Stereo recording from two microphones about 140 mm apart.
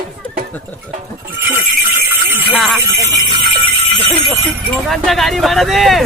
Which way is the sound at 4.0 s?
45° right (ahead or behind).